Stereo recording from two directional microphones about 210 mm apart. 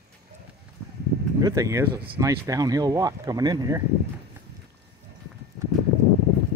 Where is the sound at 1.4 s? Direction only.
15° right (ahead or behind).